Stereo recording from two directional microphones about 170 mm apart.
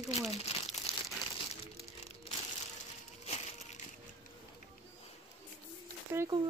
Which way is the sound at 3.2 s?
40° left (ahead or behind).